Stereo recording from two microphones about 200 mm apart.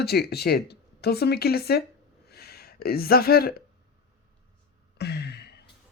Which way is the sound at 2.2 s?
55° left (ahead or behind).